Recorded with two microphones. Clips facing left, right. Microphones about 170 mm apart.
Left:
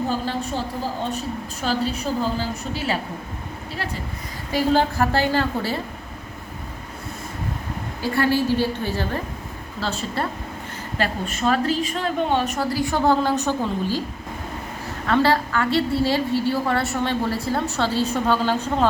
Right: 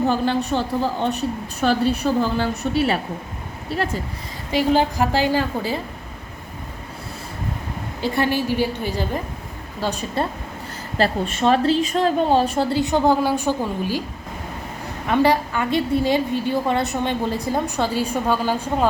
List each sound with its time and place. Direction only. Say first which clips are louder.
0.1 s a woman's voice: right 5 dB; 65° right (ahead or behind)
4.5 s a woman's voice: right 1 dB; 15° right (ahead or behind)
8.0 s a woman's voice: left 1 dB; 20° right (ahead or behind)
10.9 s a woman's voice: right 5 dB; 30° right (ahead or behind); by 14.0 s 15° right (ahead or behind)
15.0 s a woman's voice: right 1 dB; 15° right (ahead or behind)